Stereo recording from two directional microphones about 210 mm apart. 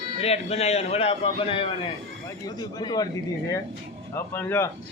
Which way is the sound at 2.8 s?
20° left (ahead or behind).